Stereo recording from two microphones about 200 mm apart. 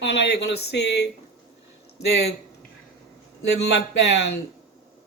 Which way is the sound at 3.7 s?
55° left (ahead or behind).